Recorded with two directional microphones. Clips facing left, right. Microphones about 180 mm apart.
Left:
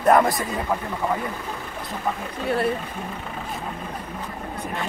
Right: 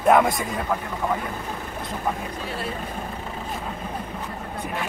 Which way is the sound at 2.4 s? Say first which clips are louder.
Left 11 dB; 60° left (ahead or behind).